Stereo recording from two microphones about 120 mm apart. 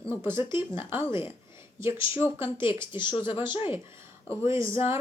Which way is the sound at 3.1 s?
45° left (ahead or behind).